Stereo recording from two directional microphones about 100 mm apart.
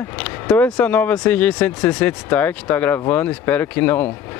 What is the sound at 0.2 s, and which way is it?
Speech, 15° left (ahead or behind).